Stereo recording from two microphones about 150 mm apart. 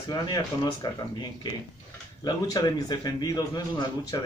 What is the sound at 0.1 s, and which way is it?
A man's voice, 25° left (ahead or behind).